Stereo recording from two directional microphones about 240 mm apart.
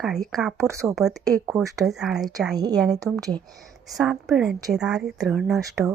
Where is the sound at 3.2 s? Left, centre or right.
Centre.